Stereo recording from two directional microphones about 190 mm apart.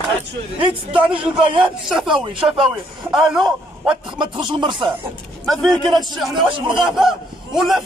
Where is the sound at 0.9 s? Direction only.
25° right (ahead or behind).